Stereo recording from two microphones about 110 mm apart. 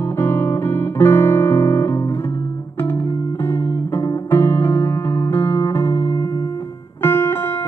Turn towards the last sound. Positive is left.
turn(degrees=20)  # may be behind; listen again after turning